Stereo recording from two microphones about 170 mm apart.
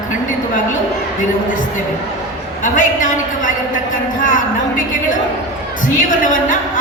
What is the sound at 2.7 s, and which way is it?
A man's voice, 50° left (ahead or behind).